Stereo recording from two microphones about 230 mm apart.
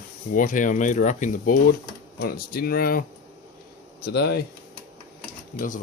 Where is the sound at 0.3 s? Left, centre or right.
Left.